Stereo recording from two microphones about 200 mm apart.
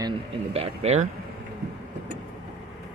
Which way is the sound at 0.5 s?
30° right (ahead or behind).